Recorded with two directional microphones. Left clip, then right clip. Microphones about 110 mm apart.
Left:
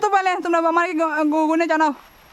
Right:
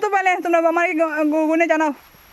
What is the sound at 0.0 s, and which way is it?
A woman's voice, centre (ahead or behind).